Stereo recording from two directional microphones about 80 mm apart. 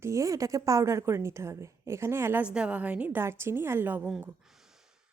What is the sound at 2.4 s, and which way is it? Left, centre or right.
Speech, centre.